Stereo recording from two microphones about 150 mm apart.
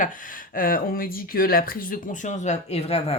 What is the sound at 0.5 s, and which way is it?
Speech, 70° left (ahead or behind).